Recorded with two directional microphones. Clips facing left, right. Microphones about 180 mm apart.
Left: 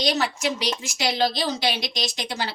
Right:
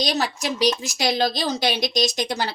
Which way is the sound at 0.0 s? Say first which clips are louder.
Even; 35° right (ahead or behind).